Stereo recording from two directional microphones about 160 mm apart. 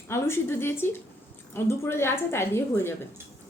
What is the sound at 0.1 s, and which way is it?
A woman's voice, 15° left (ahead or behind).